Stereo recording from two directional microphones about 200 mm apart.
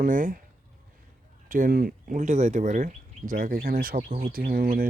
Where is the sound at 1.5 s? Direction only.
45° right (ahead or behind).